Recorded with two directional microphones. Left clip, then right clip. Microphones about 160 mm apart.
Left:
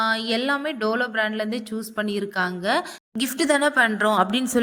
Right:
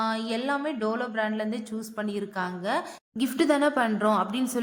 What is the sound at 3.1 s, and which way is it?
Speech, 35° left (ahead or behind).